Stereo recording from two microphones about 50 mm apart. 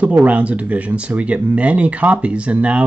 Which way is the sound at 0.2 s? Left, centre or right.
Right.